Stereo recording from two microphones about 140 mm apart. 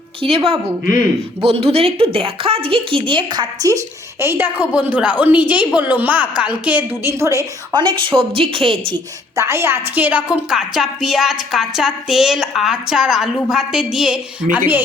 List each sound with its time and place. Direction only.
0.2 s a woman's voice: 40° right (ahead or behind)
9.3 s a woman's voice: 20° right (ahead or behind)